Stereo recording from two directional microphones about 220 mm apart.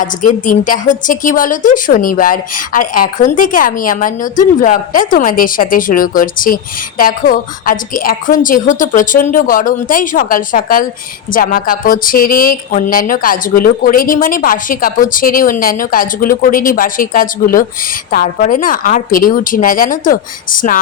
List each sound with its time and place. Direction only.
0.0 s a woman's voice: 35° left (ahead or behind)